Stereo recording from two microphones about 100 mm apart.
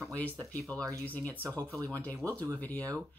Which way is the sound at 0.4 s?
35° right (ahead or behind).